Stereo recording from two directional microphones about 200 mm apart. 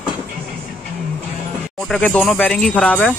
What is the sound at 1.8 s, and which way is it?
Speech, 5° left (ahead or behind).